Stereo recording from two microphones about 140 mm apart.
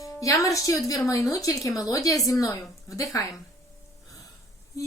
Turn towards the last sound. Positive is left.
turn(degrees=25)  # may be behind; listen again after turning